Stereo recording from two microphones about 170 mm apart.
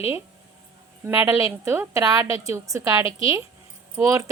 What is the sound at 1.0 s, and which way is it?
A woman's voice, 15° right (ahead or behind).